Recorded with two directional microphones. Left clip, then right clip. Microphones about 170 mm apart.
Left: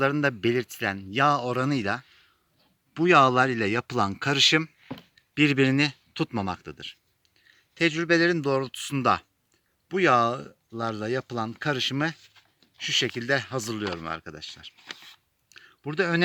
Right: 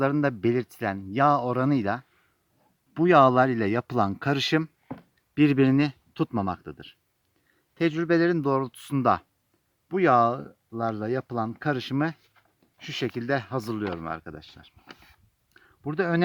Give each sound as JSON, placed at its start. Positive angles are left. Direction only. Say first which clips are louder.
{"t": 0.0, "sound": "speech", "louder": "even", "side_deg": -55}